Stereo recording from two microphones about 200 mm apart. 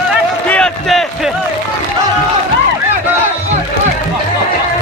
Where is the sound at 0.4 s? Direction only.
5° left (ahead or behind).